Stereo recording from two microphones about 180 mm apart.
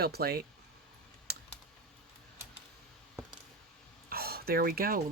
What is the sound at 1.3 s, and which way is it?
Typing, 60° right (ahead or behind).